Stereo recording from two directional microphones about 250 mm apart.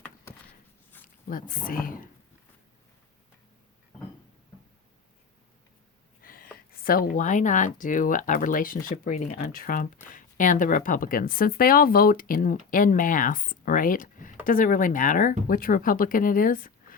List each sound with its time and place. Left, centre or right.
1.0 s speech: left
6.2 s a sound: left
6.7 s speech: left